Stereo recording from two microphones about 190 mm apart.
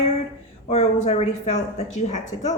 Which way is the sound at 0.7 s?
35° left (ahead or behind).